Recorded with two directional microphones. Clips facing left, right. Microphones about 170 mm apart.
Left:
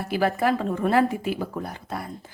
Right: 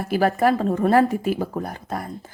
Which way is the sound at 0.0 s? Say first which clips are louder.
Right 4 dB; 45° right (ahead or behind).